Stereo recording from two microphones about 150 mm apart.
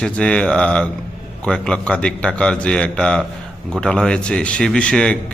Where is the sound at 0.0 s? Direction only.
5° left (ahead or behind).